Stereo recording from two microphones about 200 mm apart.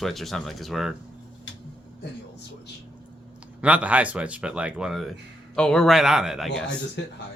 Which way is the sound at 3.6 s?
5° right (ahead or behind).